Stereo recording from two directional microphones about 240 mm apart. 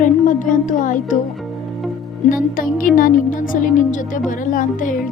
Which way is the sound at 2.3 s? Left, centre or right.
Left.